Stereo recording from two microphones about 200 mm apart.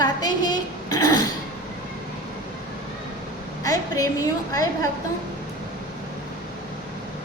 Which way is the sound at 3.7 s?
15° left (ahead or behind).